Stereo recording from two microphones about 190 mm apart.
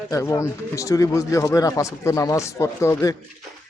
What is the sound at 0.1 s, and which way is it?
A man's voice, 15° left (ahead or behind).